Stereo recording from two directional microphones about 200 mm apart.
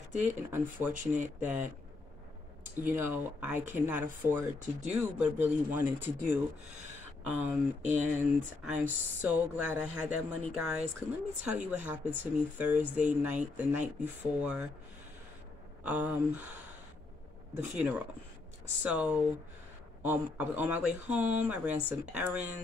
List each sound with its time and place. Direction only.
0.1 s speech: 35° right (ahead or behind)
0.5 s speech: 10° right (ahead or behind)
0.9 s speech: 40° right (ahead or behind)
1.4 s speech: 10° right (ahead or behind)
2.8 s speech: 10° right (ahead or behind)
4.6 s speech: 35° right (ahead or behind)
5.0 s speech: 10° right (ahead or behind)
8.6 s speech: 5° right (ahead or behind)
15.8 s speech: 5° right (ahead or behind)
17.7 s speech: 5° right (ahead or behind)